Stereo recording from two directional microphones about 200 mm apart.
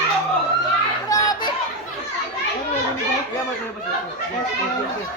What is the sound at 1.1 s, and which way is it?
Children playing, 20° left (ahead or behind).